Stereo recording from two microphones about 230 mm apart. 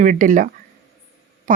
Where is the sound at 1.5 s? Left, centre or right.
Right.